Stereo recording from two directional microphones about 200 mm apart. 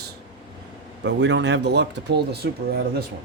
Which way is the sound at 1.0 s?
60° right (ahead or behind).